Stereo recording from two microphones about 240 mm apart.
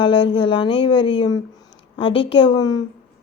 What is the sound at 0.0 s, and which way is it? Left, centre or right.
A woman's voice, left.